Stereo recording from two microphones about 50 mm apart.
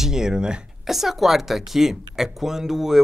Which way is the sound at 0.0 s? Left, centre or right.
Centre.